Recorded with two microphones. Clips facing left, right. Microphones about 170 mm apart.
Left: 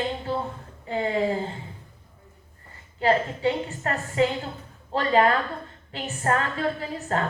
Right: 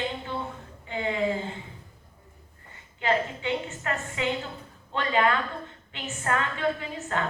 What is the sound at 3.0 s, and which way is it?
A woman's voice, 35° left (ahead or behind).